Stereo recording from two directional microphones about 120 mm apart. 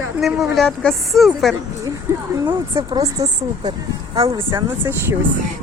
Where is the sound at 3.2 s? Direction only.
30° right (ahead or behind).